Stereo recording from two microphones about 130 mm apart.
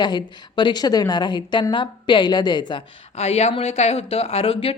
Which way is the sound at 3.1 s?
55° left (ahead or behind).